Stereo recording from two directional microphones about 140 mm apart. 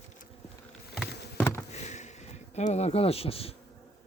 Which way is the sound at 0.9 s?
5° left (ahead or behind).